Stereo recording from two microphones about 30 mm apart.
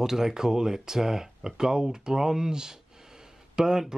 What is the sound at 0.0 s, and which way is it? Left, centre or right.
Speech, centre.